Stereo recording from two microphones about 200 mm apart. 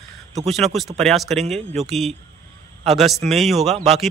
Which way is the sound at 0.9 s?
Centre (ahead or behind).